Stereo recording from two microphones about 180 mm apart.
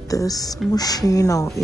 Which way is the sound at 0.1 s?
20° left (ahead or behind).